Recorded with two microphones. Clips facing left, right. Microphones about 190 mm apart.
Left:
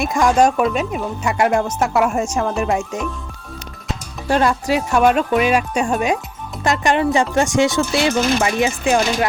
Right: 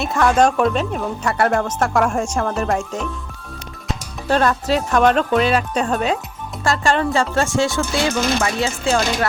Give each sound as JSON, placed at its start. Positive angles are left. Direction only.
{"t": 0.0, "sound": "speech", "side_deg": 10}
{"t": 4.3, "sound": "speech", "side_deg": 10}